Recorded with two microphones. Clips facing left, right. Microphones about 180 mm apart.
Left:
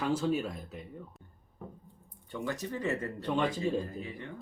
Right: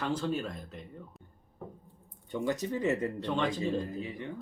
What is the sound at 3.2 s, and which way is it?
Speech, 10° left (ahead or behind).